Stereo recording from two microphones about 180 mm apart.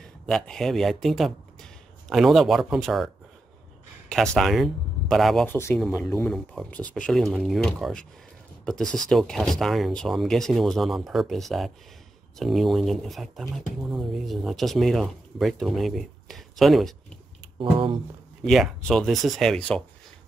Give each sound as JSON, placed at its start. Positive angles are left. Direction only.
{"t": 0.0, "sound": "speech", "side_deg": 5}
{"t": 4.4, "sound": "speech", "side_deg": 0}
{"t": 5.5, "sound": "speech", "side_deg": 15}
{"t": 17.6, "sound": "a sound", "side_deg": -30}
{"t": 18.4, "sound": "speech", "side_deg": 0}